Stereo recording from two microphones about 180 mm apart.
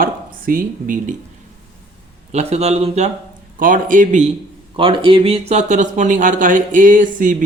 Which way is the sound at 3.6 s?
50° right (ahead or behind).